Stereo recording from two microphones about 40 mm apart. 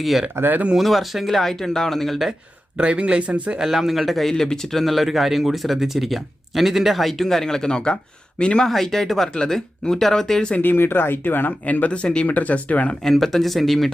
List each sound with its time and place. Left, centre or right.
0.4 s speech: right
0.8 s speech: centre
2.7 s speech: right
3.6 s speech: centre
4.3 s speech: centre
8.6 s speech: centre
9.3 s speech: centre
10.6 s speech: left
11.9 s speech: left
12.3 s speech: left
13.1 s speech: centre